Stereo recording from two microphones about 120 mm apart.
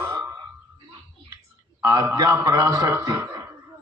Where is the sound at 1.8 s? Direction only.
25° right (ahead or behind).